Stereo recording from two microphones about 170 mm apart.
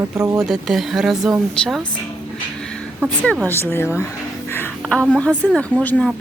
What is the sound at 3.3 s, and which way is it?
A woman's voice, 10° left (ahead or behind).